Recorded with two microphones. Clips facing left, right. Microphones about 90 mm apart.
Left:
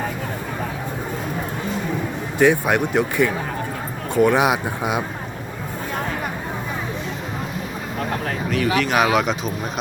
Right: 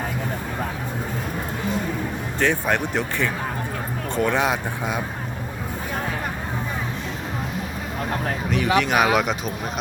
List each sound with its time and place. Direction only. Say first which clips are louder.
2.4 s speech: left 5 dB; 10° left (ahead or behind)
8.4 s speech: even; 15° right (ahead or behind)
9.0 s speech: left 1 dB; 5° right (ahead or behind)